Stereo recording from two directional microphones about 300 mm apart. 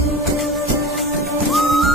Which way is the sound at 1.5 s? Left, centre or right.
Centre.